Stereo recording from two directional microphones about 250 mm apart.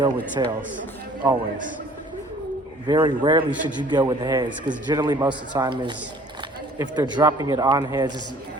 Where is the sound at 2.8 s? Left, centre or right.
Centre.